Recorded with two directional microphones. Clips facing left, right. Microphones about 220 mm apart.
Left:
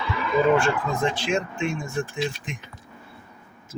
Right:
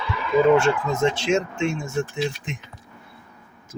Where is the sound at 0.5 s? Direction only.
25° right (ahead or behind).